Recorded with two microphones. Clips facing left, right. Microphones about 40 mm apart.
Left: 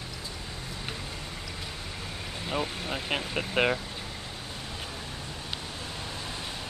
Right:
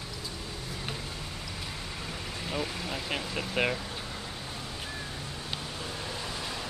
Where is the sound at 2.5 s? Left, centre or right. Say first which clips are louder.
Left 3 dB; left.